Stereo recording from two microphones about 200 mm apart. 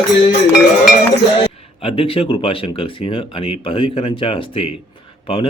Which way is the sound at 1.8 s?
25° left (ahead or behind).